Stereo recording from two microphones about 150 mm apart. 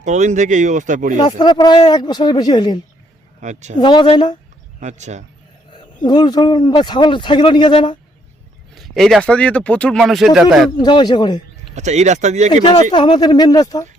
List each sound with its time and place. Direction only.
0.0 s speech: 55° right (ahead or behind)
1.1 s speech: 30° left (ahead or behind)
3.4 s speech: 50° right (ahead or behind)
3.8 s speech: 30° left (ahead or behind)
4.8 s speech: 50° right (ahead or behind)
6.1 s speech: 25° left (ahead or behind)
8.7 s speech: centre (ahead or behind)
10.7 s speech: 30° left (ahead or behind)
11.7 s speech: 50° right (ahead or behind)
12.9 s speech: 30° left (ahead or behind)